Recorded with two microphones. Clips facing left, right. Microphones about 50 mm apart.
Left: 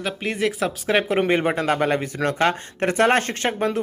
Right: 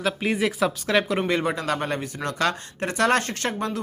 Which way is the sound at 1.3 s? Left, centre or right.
Left.